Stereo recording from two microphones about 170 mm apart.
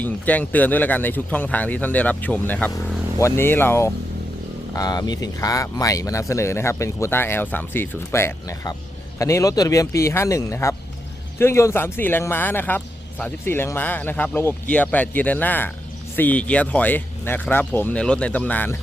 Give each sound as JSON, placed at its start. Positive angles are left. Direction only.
{"t": 0.0, "sound": "speech", "side_deg": 10}